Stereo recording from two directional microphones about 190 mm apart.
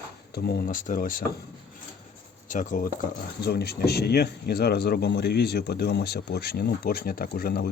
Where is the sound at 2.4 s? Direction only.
40° left (ahead or behind).